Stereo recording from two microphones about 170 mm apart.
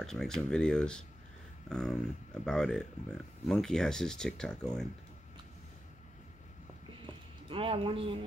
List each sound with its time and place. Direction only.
0.0 s speech: centre (ahead or behind)
7.4 s speech: 30° right (ahead or behind)